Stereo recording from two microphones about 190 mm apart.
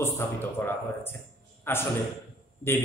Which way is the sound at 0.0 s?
10° left (ahead or behind).